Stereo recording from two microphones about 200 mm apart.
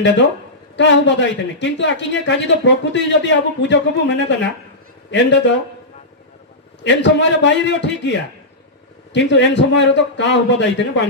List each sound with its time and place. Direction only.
0.0 s speech: 60° left (ahead or behind)
6.8 s speech: 60° left (ahead or behind)